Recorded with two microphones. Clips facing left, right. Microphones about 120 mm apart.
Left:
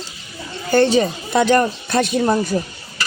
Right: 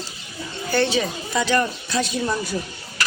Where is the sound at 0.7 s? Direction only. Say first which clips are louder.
Left 7 dB; 45° left (ahead or behind).